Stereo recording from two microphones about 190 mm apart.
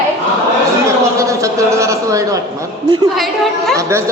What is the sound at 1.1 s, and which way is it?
Speech, 15° right (ahead or behind).